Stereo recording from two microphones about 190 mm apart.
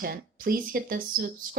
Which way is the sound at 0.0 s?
50° right (ahead or behind).